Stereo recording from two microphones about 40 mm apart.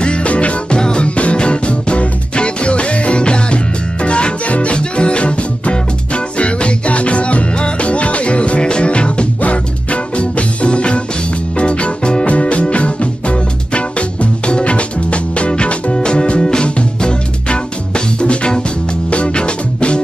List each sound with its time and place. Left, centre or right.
0.0 s music: left
0.7 s music: left